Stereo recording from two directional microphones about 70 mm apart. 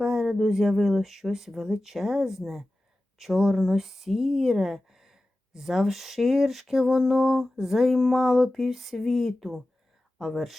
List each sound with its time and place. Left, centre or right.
0.0 s speech: centre